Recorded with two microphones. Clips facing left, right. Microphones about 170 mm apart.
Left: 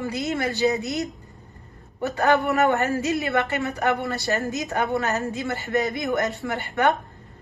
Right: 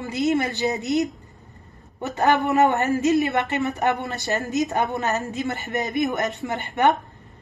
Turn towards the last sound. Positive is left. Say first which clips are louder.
# right 2 dB
turn(degrees=-20)  # may be behind; listen again after turning